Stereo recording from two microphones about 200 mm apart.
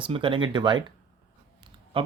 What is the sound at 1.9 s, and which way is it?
Speech, 25° right (ahead or behind).